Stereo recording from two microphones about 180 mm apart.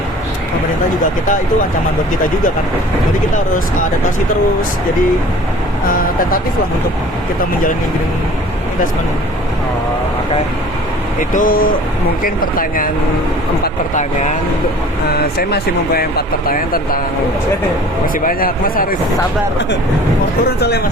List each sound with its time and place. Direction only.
5.9 s speech: 50° left (ahead or behind)
11.2 s speech: 50° left (ahead or behind)
13.9 s speech: 45° left (ahead or behind)
15.2 s speech: 60° left (ahead or behind)
18.0 s speech: 50° left (ahead or behind)
20.6 s speech: 65° left (ahead or behind)